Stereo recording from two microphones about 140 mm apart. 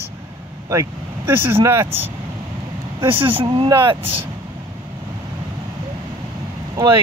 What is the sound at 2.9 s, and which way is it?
Speech, 40° right (ahead or behind).